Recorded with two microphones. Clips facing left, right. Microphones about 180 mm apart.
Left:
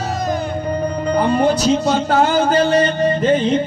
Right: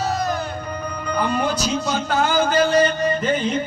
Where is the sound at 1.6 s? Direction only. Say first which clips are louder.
Left 7 dB; 30° left (ahead or behind).